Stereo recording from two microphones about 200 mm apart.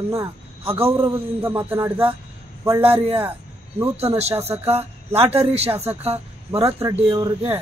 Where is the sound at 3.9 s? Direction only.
30° right (ahead or behind).